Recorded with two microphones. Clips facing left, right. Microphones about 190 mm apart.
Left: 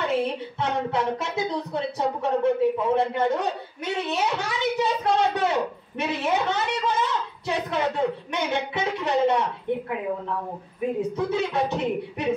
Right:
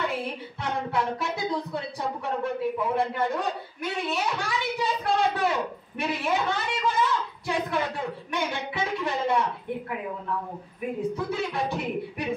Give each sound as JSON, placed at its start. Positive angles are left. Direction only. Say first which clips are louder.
{"t": 0.1, "sound": "speech", "louder": "left 7 dB", "side_deg": 20}
{"t": 11.0, "sound": "speech", "louder": "left 2 dB", "side_deg": 20}